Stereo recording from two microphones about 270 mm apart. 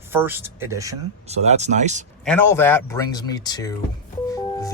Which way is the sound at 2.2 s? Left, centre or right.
Centre.